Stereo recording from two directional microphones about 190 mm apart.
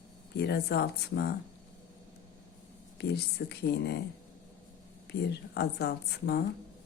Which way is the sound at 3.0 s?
60° left (ahead or behind).